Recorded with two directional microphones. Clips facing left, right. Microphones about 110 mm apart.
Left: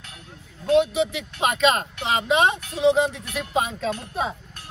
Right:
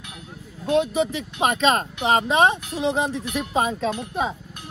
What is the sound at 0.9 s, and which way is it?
Speech, 35° right (ahead or behind).